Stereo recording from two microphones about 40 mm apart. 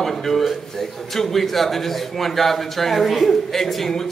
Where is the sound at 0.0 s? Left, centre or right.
Centre.